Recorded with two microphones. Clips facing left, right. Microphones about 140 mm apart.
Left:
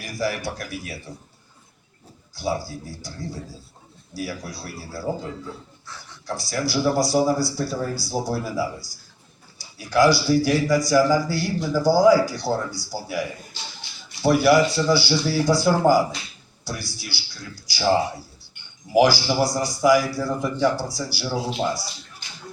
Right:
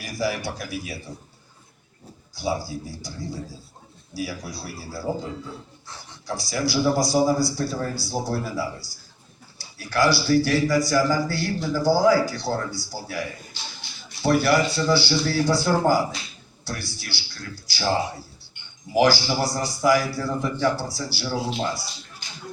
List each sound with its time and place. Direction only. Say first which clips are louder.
0.0 s speech: even; centre (ahead or behind)
2.3 s speech: even; centre (ahead or behind)
4.1 s speech: even; centre (ahead or behind)
6.5 s a man's voice: even; centre (ahead or behind)
18.9 s a man's voice: left 2 dB; 10° left (ahead or behind)